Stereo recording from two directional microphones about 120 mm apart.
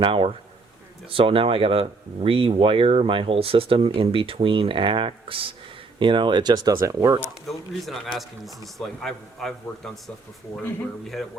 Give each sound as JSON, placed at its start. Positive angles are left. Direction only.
{"t": 0.0, "sound": "speech", "side_deg": -50}
{"t": 7.4, "sound": "a man's voice", "side_deg": 0}
{"t": 11.0, "sound": "a man's voice", "side_deg": 0}